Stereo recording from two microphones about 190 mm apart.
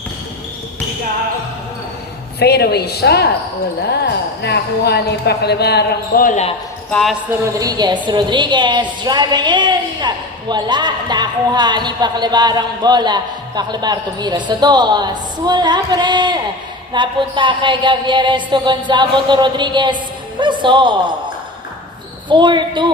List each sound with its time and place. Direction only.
2.4 s speech: 60° left (ahead or behind); by 6.5 s 40° left (ahead or behind)
6.9 s speech: centre (ahead or behind)
7.3 s speech: 15° right (ahead or behind)
22.3 s speech: 25° right (ahead or behind)